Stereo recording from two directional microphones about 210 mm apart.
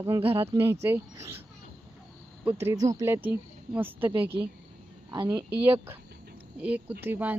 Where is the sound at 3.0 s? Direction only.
10° right (ahead or behind).